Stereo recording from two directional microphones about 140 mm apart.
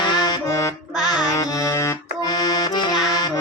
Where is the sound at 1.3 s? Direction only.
25° left (ahead or behind).